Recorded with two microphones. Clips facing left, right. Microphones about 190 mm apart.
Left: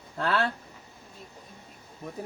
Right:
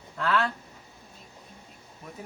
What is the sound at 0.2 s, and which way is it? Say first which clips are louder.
Speech: even; 35° left (ahead or behind).